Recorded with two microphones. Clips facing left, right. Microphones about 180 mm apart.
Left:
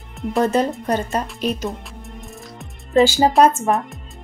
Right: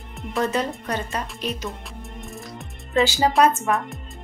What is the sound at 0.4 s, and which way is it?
Speech, 40° left (ahead or behind).